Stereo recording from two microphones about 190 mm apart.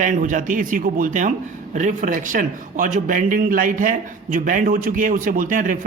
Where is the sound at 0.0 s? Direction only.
40° right (ahead or behind).